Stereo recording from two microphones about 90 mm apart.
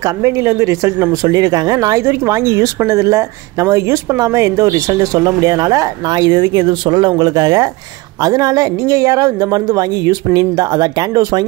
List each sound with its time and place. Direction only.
0.0 s a woman's voice: 35° right (ahead or behind)
2.0 s a woman's voice: 30° right (ahead or behind); by 11.4 s 50° right (ahead or behind)